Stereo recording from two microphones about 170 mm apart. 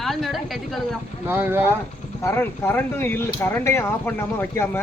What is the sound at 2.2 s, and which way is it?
Speech, 15° left (ahead or behind).